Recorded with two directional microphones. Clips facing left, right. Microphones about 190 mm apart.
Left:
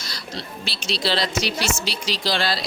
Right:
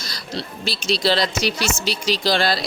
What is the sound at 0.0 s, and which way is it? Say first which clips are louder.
A woman's voice: right 3 dB; 40° right (ahead or behind).